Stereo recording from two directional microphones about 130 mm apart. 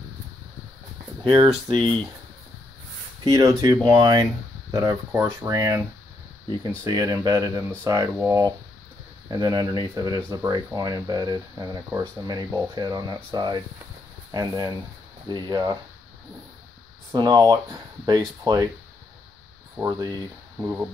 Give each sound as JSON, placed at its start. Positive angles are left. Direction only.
{"t": 1.2, "sound": "speech", "side_deg": -35}
{"t": 3.3, "sound": "speech", "side_deg": -30}
{"t": 5.1, "sound": "speech", "side_deg": -15}
{"t": 5.5, "sound": "speech", "side_deg": -25}
{"t": 17.1, "sound": "speech", "side_deg": -30}
{"t": 19.8, "sound": "speech", "side_deg": -30}
{"t": 20.5, "sound": "speech", "side_deg": -15}